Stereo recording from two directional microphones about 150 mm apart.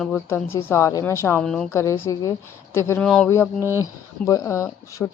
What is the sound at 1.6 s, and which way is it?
A woman's voice, 20° left (ahead or behind).